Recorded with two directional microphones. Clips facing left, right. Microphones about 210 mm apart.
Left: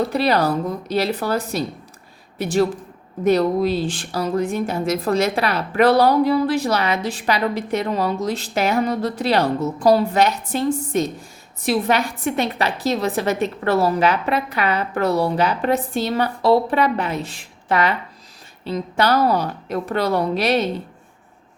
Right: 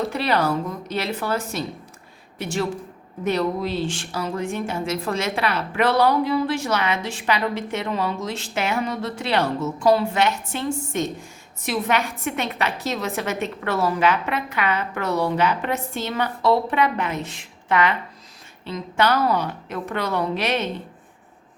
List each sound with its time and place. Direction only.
0.1 s a woman's voice: 35° left (ahead or behind)